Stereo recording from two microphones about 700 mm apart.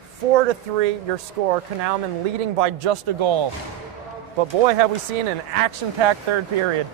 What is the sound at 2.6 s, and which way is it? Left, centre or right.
Speech, right.